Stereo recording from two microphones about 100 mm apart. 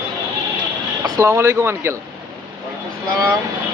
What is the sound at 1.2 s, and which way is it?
Speech, 25° right (ahead or behind).